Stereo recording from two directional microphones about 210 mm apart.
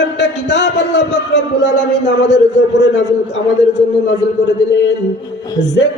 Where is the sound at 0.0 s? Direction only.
55° left (ahead or behind).